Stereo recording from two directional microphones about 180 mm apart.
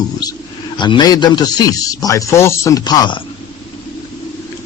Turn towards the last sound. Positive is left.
turn(degrees=25)  # may be behind; listen again after turning